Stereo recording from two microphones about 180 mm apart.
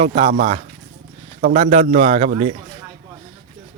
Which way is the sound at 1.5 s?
35° right (ahead or behind).